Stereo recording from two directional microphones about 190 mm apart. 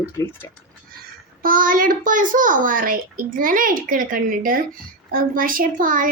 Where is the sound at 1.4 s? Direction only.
50° right (ahead or behind).